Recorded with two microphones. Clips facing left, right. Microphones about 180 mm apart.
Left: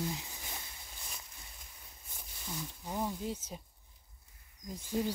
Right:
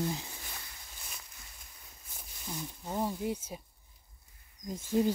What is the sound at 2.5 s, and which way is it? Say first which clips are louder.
Speech: right 3 dB; 15° right (ahead or behind).